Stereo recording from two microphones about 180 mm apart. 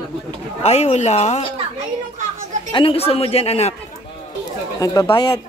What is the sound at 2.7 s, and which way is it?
Speech, 30° left (ahead or behind).